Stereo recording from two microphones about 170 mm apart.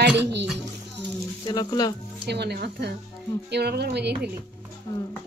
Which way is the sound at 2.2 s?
75° right (ahead or behind).